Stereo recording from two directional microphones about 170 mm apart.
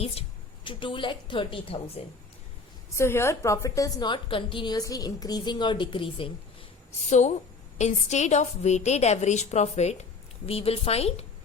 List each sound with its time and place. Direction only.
0.0 s a woman's voice: 30° left (ahead or behind)
3.0 s a woman's voice: 15° left (ahead or behind); by 6.3 s 30° left (ahead or behind)
7.1 s a woman's voice: 40° left (ahead or behind)